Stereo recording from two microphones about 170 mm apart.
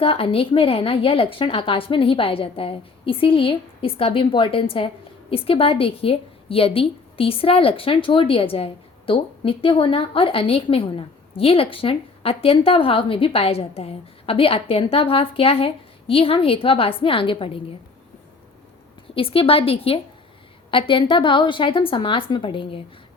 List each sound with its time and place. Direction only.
0.0 s a woman's voice: 30° left (ahead or behind)
19.1 s a woman's voice: 35° left (ahead or behind)